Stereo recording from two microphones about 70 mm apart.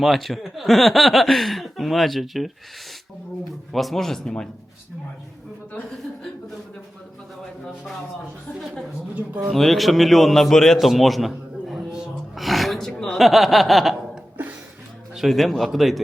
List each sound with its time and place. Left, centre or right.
0.0 s speech: centre
3.7 s speech: centre
9.1 s speech: right
9.5 s speech: centre
11.9 s a sound: centre
15.1 s speech: centre